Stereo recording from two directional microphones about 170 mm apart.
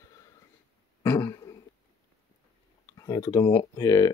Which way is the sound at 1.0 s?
15° left (ahead or behind).